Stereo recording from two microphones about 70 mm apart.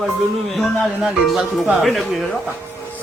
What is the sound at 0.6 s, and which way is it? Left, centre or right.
Speech, centre.